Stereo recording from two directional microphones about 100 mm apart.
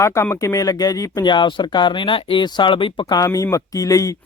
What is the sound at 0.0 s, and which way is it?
Speech, 30° left (ahead or behind).